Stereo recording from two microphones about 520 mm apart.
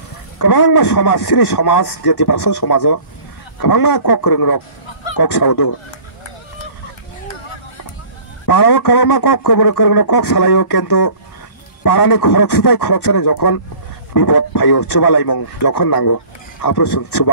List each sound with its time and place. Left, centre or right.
0.4 s a man's voice: left
8.5 s speech: left